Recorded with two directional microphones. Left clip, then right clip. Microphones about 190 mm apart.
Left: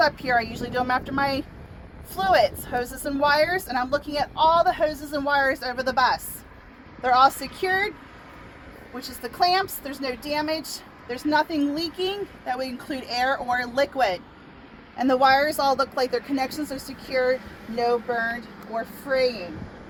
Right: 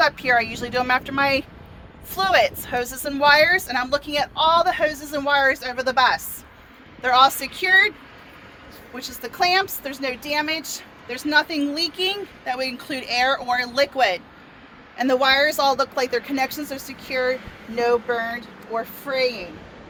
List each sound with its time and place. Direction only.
0.0 s a woman's voice: 55° right (ahead or behind)
7.0 s a woman's voice: 55° right (ahead or behind)
9.2 s speech: 50° right (ahead or behind)
11.1 s a woman's voice: 60° right (ahead or behind); by 19.5 s 35° right (ahead or behind)